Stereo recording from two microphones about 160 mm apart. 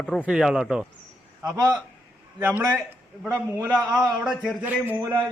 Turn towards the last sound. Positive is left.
turn(degrees=-15)  # may be behind; listen again after turning